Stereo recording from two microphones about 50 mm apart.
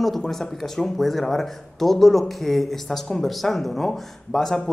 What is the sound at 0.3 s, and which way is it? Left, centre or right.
Speech, centre.